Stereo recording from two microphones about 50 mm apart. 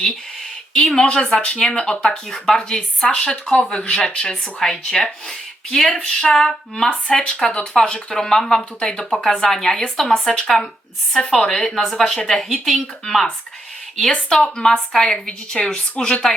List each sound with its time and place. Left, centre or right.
0.7 s speech: centre
4.6 s speech: centre; by 16.2 s left